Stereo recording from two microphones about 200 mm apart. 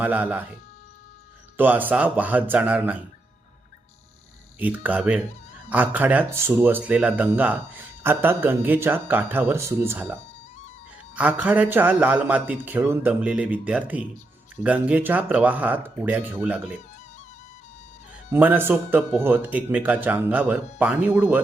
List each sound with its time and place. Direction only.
0.0 s speech: 5° right (ahead or behind)
1.5 s speech: 10° right (ahead or behind)
4.6 s speech: 5° right (ahead or behind)
18.3 s speech: 10° right (ahead or behind)